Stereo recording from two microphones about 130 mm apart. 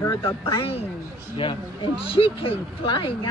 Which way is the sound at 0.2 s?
45° left (ahead or behind).